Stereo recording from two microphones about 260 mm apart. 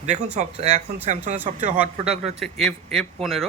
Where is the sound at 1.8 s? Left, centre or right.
Centre.